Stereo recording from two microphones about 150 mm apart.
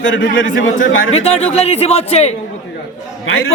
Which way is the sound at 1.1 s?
45° left (ahead or behind).